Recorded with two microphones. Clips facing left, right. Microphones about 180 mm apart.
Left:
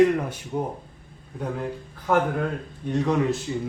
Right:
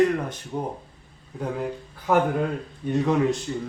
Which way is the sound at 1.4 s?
5° right (ahead or behind).